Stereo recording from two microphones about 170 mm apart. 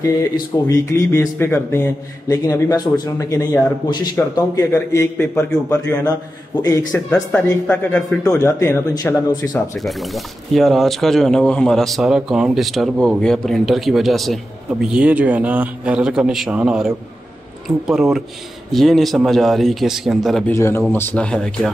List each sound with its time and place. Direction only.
0.0 s speech: 20° left (ahead or behind)
5.1 s speech: 15° left (ahead or behind)
6.9 s speech: 10° left (ahead or behind)
8.4 s speech: 15° left (ahead or behind)
9.8 s a man's voice: centre (ahead or behind)
20.5 s speech: 15° left (ahead or behind)